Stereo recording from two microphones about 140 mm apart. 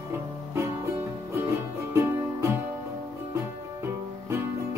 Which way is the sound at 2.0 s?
20° right (ahead or behind).